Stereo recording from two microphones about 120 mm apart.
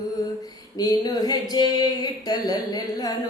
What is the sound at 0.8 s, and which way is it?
Speech, 35° left (ahead or behind).